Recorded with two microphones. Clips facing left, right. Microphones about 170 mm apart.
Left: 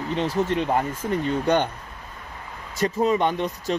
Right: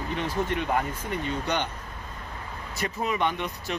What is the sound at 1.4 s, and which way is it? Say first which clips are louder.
Speech: left 10 dB; 50° left (ahead or behind).